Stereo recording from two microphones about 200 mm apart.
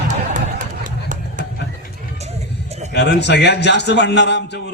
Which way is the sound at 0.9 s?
40° right (ahead or behind).